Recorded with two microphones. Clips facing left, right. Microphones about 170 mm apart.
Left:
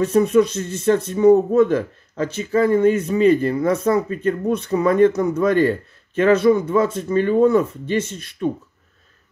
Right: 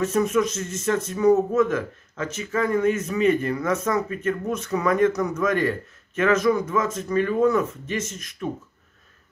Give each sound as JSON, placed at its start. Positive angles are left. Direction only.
{"t": 0.0, "sound": "speech", "side_deg": 35}